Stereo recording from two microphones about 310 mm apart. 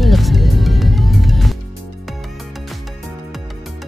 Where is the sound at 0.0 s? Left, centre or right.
Centre.